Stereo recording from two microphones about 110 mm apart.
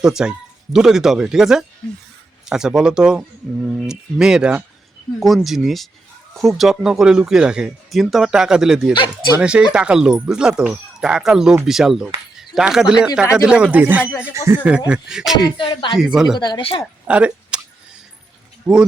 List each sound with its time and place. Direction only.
0.0 s speech: 5° right (ahead or behind)
8.9 s speech: 40° left (ahead or behind)
9.4 s speech: 10° right (ahead or behind)
12.4 s a sound: 5° right (ahead or behind)
13.3 s speech: 10° right (ahead or behind)
15.5 s speech: 50° left (ahead or behind)
16.0 s speech: 5° right (ahead or behind)
16.4 s speech: 40° left (ahead or behind)
17.1 s a sound: 10° right (ahead or behind)
18.6 s speech: 10° right (ahead or behind)